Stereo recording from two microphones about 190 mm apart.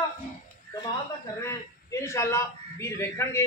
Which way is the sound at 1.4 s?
15° left (ahead or behind).